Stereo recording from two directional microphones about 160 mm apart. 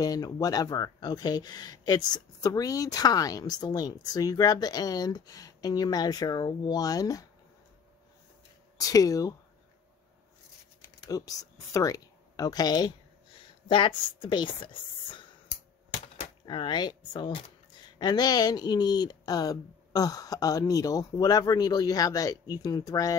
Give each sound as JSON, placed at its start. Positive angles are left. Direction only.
{"t": 0.0, "sound": "speech", "side_deg": 25}
{"t": 8.7, "sound": "speech", "side_deg": 20}
{"t": 10.8, "sound": "speech", "side_deg": 20}
{"t": 16.4, "sound": "speech", "side_deg": 30}